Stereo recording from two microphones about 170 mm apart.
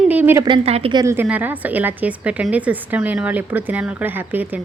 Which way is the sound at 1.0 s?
10° right (ahead or behind).